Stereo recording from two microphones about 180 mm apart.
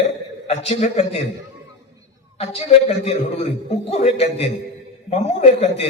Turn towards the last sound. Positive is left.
turn(degrees=35)  # may be behind; listen again after turning